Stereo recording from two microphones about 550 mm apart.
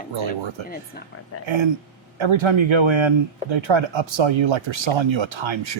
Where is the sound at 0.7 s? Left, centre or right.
Centre.